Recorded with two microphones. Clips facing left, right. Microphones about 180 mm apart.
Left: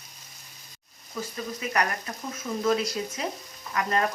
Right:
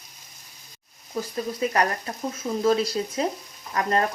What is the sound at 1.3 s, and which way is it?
Sizzle, 35° right (ahead or behind).